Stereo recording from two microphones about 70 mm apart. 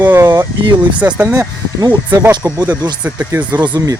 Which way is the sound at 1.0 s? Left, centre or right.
Centre.